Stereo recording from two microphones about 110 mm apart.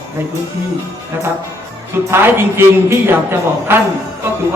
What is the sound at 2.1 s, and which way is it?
Speech, 20° right (ahead or behind).